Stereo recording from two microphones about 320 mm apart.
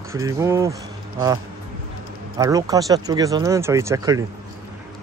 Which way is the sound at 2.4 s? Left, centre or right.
Centre.